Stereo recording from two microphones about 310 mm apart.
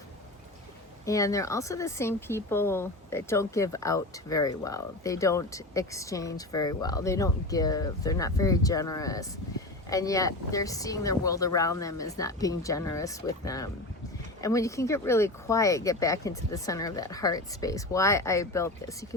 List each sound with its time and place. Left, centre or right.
1.0 s speech: centre